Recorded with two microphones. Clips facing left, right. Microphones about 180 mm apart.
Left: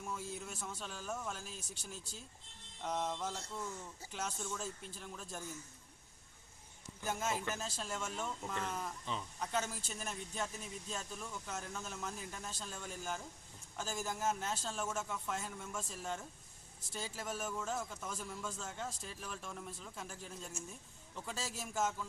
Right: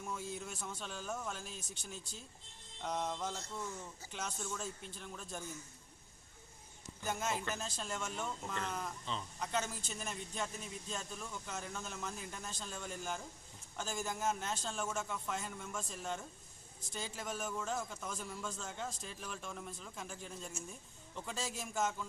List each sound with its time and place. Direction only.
0.0 s a man's voice: 5° left (ahead or behind)
7.0 s speech: 5° left (ahead or behind)